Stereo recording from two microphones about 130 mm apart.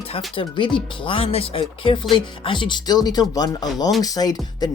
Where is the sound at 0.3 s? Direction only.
40° left (ahead or behind).